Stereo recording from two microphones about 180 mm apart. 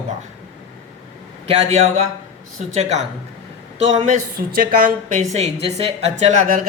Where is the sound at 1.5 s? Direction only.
35° right (ahead or behind).